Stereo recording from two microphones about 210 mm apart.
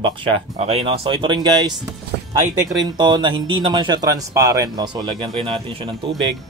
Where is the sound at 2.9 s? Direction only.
20° right (ahead or behind).